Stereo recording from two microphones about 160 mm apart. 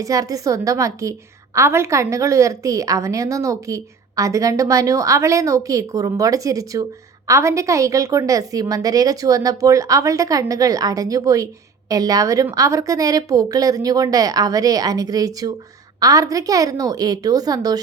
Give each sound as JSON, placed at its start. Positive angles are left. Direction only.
{"t": 0.0, "sound": "a woman's voice", "side_deg": -20}